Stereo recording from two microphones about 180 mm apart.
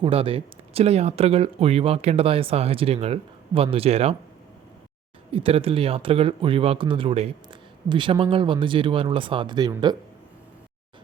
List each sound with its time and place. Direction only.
0.0 s speech: 30° right (ahead or behind)
5.3 s speech: 30° right (ahead or behind)